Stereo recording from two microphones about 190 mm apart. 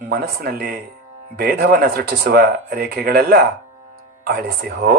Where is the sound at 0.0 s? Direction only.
50° right (ahead or behind).